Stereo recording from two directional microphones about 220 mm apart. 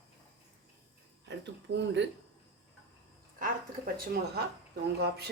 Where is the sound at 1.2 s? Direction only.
55° right (ahead or behind).